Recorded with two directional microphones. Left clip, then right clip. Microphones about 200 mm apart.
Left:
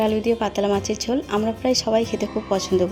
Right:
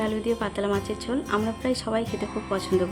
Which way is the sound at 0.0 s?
15° left (ahead or behind).